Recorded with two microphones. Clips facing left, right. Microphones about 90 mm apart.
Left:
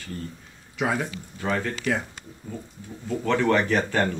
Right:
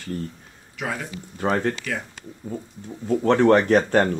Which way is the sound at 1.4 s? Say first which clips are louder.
Right 5 dB; 40° right (ahead or behind).